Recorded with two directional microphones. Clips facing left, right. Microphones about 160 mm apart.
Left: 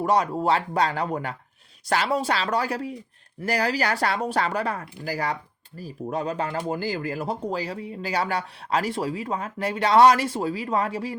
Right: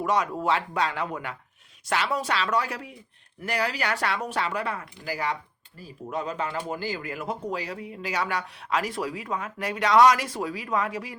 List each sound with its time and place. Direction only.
0.0 s speech: 35° left (ahead or behind)